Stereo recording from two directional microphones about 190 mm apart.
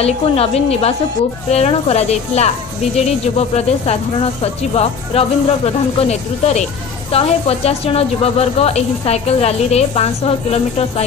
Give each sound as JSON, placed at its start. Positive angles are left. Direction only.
{"t": 0.0, "sound": "speech", "side_deg": 30}